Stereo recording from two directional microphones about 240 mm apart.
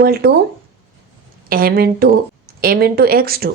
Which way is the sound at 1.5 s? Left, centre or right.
Right.